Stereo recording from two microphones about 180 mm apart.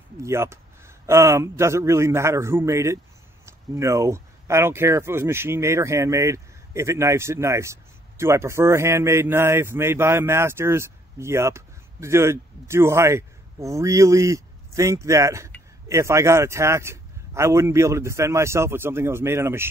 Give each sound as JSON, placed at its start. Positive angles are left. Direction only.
{"t": 0.2, "sound": "speech", "side_deg": -15}